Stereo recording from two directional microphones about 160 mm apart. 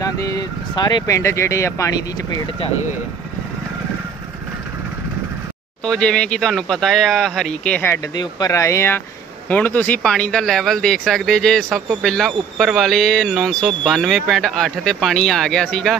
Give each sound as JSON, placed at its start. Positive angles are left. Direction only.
{"t": 0.0, "sound": "speech", "side_deg": 20}
{"t": 5.9, "sound": "speech", "side_deg": 5}
{"t": 8.1, "sound": "speech", "side_deg": 25}